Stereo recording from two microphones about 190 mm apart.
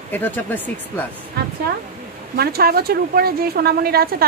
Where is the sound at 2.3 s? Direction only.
55° right (ahead or behind).